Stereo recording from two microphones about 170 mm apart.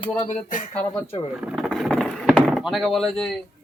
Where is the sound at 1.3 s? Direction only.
5° right (ahead or behind).